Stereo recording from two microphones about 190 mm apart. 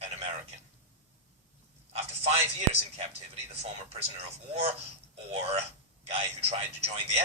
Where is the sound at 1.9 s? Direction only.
30° right (ahead or behind).